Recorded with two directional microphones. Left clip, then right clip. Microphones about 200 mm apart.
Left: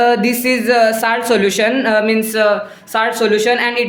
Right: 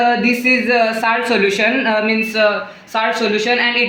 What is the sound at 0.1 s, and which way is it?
A woman's voice, 40° left (ahead or behind).